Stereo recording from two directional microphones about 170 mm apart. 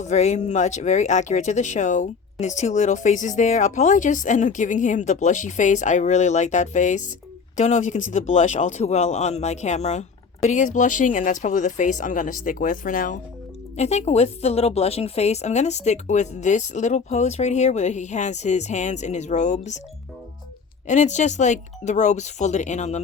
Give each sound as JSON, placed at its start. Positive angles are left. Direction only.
{"t": 0.0, "sound": "speech", "side_deg": 45}
{"t": 13.7, "sound": "speech", "side_deg": 40}
{"t": 20.8, "sound": "speech", "side_deg": 45}